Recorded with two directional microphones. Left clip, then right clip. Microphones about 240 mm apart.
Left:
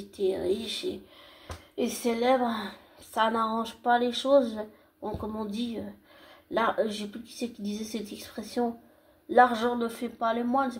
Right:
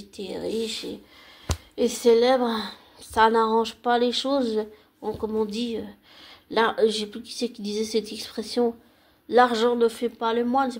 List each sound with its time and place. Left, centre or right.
0.1 s a woman's voice: right